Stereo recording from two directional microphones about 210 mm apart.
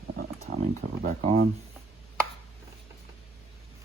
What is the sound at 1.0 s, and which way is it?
Speech, 35° right (ahead or behind).